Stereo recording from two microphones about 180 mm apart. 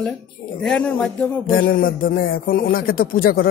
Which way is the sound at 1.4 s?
60° left (ahead or behind).